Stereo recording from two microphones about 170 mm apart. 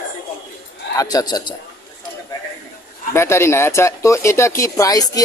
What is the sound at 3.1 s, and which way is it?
A man's voice, 15° left (ahead or behind).